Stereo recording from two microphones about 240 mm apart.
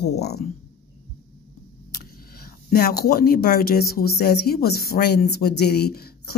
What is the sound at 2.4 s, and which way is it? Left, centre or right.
Speech, left.